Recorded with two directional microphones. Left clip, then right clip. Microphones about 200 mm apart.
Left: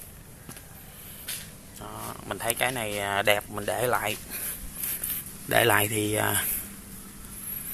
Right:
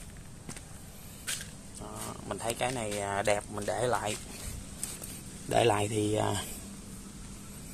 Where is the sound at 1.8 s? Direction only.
15° left (ahead or behind).